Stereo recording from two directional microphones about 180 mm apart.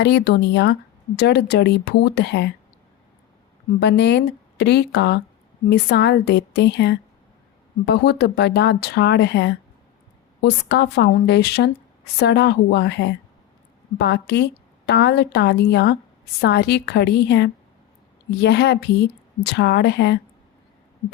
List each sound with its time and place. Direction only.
0.0 s speech: 70° left (ahead or behind)
3.8 s speech: 75° left (ahead or behind)